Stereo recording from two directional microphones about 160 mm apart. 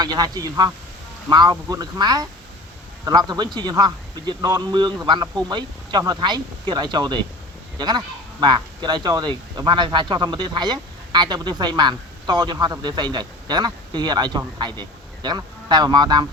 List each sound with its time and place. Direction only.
0.0 s speech: 25° right (ahead or behind)